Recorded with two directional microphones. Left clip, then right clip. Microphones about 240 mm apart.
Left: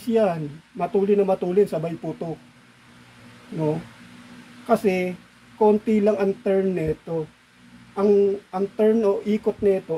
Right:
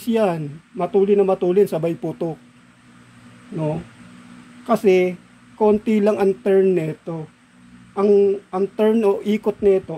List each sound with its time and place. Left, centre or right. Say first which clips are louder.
0.0 s speech: right 1 dB; right
4.6 s speech: right 5 dB; right
7.9 s speech: right 3 dB; right